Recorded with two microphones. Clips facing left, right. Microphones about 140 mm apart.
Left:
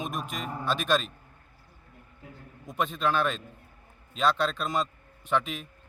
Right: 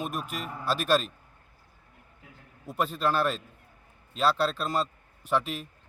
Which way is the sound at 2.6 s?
5° right (ahead or behind).